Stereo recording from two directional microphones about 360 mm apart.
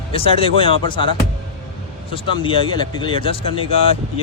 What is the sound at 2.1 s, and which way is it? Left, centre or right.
Speech, centre.